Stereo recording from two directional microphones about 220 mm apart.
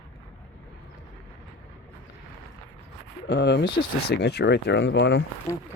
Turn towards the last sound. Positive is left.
turn(degrees=10)  # may be behind; listen again after turning